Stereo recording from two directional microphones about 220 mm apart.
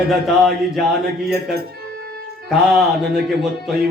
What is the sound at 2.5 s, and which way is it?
Speech, centre (ahead or behind).